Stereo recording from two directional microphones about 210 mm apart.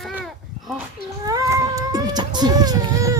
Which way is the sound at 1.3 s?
15° right (ahead or behind).